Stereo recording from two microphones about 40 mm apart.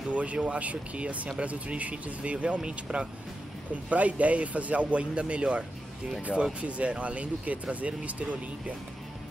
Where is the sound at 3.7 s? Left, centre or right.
Right.